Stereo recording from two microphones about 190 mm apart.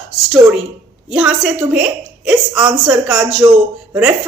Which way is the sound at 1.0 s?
5° right (ahead or behind).